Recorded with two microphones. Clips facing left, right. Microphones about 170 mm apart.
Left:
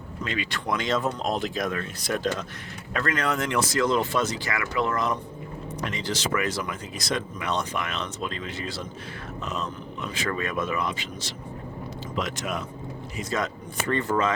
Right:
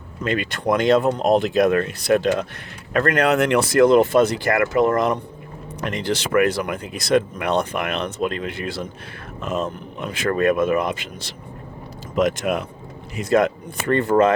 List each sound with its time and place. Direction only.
0.3 s speech: 55° right (ahead or behind)